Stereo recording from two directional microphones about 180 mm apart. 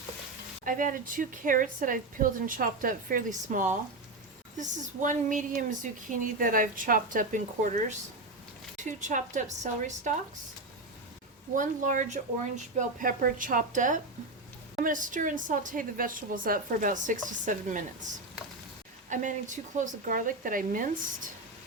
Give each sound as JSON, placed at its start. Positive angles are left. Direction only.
{"t": 0.6, "sound": "speech", "side_deg": -50}
{"t": 11.5, "sound": "speech", "side_deg": -45}
{"t": 19.0, "sound": "speech", "side_deg": -45}